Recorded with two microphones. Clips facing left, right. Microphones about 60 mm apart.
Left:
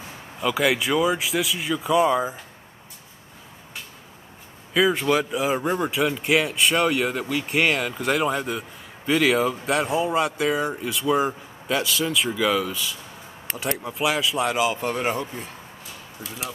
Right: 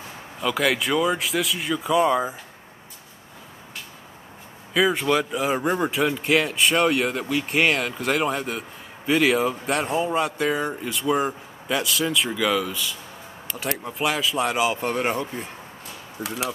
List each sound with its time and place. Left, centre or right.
0.4 s speech: centre
4.7 s a man's voice: centre
16.2 s speech: right